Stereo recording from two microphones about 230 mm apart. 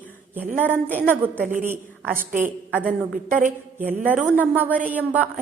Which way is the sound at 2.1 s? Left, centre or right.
Right.